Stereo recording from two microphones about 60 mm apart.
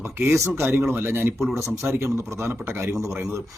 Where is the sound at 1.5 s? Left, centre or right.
Right.